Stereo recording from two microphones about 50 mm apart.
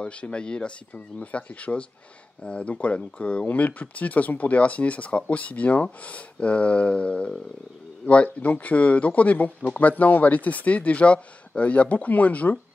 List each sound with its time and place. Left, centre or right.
0.0 s speech: left